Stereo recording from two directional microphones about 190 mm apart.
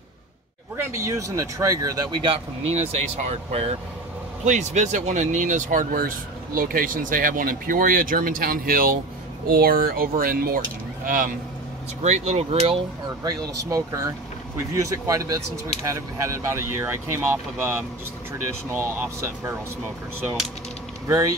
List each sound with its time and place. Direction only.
0.7 s speech: 15° right (ahead or behind)
2.7 s speech: 35° right (ahead or behind)
12.0 s speech: 35° right (ahead or behind)
13.7 s speech: 15° right (ahead or behind)
18.9 s speech: 15° right (ahead or behind)